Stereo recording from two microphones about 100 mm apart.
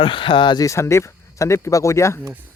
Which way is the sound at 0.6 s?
30° left (ahead or behind).